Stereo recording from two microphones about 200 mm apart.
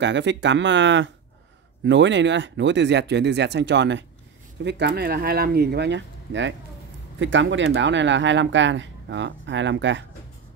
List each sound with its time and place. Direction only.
0.0 s speech: 65° right (ahead or behind)